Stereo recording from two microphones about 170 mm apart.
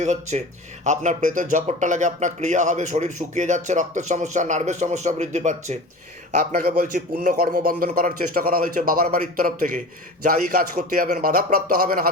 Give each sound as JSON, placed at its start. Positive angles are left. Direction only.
{"t": 0.0, "sound": "speech", "side_deg": -45}
{"t": 6.6, "sound": "a man's voice", "side_deg": -60}